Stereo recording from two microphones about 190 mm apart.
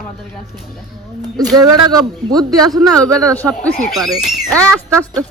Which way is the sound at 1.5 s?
20° right (ahead or behind).